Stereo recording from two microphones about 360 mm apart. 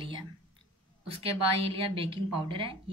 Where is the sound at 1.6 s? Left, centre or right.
Centre.